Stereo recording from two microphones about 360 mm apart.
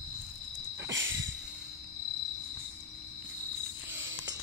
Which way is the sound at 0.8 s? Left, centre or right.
Right.